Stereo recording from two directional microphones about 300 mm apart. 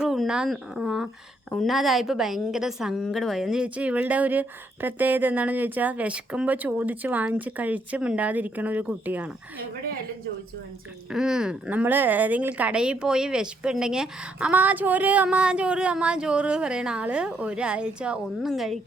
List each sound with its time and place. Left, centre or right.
0.0 s a woman's voice: centre
11.1 s a woman's voice: centre